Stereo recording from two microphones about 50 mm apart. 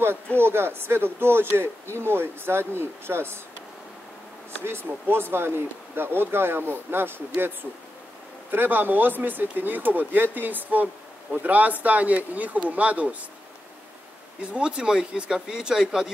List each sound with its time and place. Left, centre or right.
0.4 s speech: right
4.6 s speech: right
14.4 s speech: right